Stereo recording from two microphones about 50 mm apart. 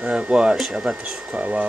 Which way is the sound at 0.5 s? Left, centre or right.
Centre.